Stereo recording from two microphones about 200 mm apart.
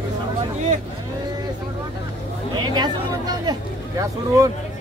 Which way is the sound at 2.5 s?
20° right (ahead or behind).